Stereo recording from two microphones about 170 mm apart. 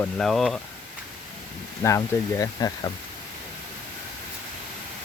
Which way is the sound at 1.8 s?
20° left (ahead or behind).